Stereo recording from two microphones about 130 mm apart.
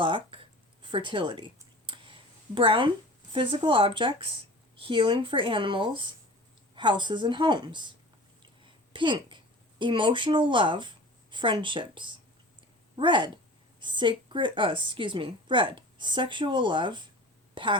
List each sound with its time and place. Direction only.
0.0 s speech: 40° right (ahead or behind)
2.6 s a woman's voice: 40° right (ahead or behind)
8.4 s a sound: 40° right (ahead or behind)
13.0 s a woman's voice: 40° right (ahead or behind)